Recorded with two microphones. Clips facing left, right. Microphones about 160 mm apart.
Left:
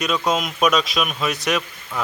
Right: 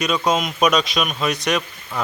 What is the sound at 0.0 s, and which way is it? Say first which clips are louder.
A man's voice: right 1 dB; centre (ahead or behind).